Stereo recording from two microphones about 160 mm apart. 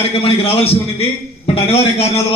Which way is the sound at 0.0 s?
40° left (ahead or behind).